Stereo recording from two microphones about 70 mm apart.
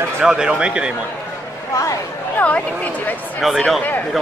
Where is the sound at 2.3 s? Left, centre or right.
Centre.